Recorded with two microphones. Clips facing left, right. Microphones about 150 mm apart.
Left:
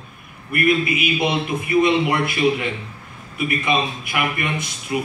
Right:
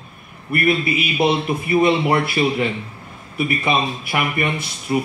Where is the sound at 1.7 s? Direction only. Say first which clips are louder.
Right 1 dB; 35° right (ahead or behind).